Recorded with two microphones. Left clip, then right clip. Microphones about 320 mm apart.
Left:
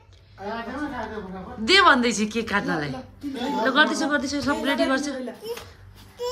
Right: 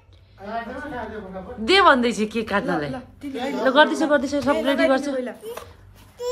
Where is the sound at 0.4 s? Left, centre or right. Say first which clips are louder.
Left 2 dB; left.